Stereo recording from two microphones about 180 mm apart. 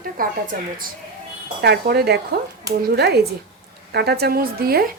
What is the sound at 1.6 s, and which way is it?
A woman's voice, 60° right (ahead or behind).